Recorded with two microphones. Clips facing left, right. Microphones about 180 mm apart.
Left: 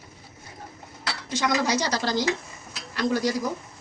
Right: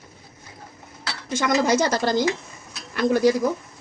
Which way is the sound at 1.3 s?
50° right (ahead or behind).